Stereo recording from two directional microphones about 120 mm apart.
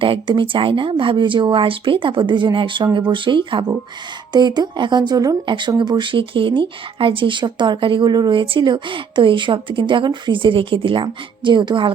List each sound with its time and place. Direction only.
0.0 s speech: 45° right (ahead or behind)